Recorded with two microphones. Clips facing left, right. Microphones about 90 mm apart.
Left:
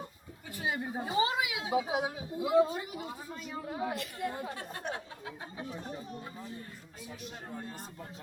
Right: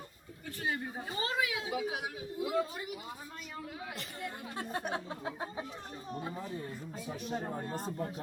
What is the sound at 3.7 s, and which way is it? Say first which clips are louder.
Speech: left 7 dB; 35° left (ahead or behind).